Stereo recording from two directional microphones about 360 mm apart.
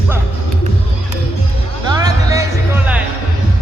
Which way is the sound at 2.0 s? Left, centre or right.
Centre.